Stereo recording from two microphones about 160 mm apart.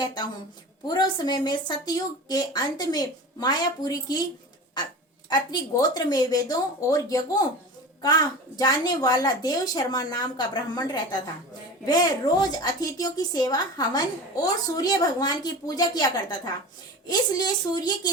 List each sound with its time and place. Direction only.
0.0 s a woman's voice: 25° left (ahead or behind)
5.3 s a woman's voice: 25° left (ahead or behind)